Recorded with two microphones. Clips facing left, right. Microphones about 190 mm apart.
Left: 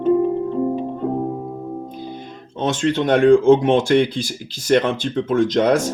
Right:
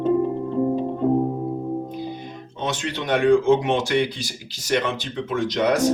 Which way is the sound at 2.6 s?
50° left (ahead or behind).